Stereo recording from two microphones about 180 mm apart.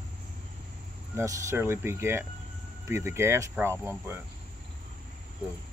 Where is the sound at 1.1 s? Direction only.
15° right (ahead or behind).